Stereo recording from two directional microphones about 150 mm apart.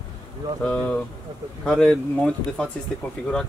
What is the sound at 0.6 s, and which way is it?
Speech, 10° left (ahead or behind).